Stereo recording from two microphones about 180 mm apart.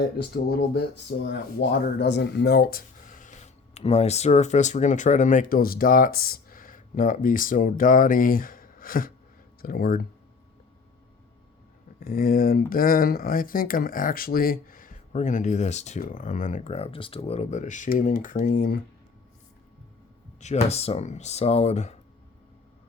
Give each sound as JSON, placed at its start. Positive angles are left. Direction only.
{"t": 0.2, "sound": "speech", "side_deg": 65}
{"t": 11.9, "sound": "speech", "side_deg": 55}
{"t": 20.4, "sound": "speech", "side_deg": 35}